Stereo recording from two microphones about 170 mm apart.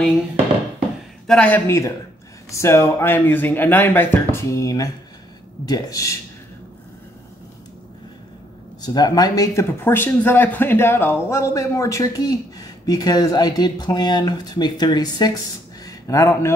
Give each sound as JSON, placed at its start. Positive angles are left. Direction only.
{"t": 1.2, "sound": "speech", "side_deg": 5}
{"t": 8.8, "sound": "speech", "side_deg": 25}